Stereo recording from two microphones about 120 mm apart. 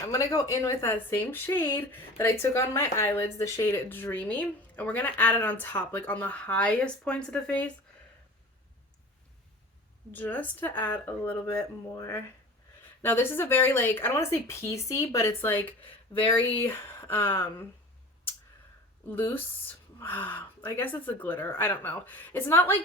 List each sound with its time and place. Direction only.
0.1 s a woman's voice: 25° left (ahead or behind); by 7.7 s 10° left (ahead or behind)
10.1 s a woman's voice: 15° left (ahead or behind)
16.1 s speech: 35° left (ahead or behind)
16.6 s speech: 15° left (ahead or behind)
19.0 s speech: 20° left (ahead or behind)